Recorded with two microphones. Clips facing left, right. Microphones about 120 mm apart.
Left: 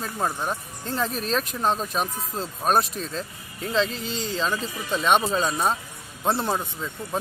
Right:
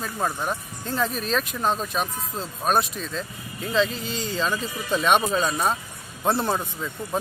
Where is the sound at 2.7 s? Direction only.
35° left (ahead or behind).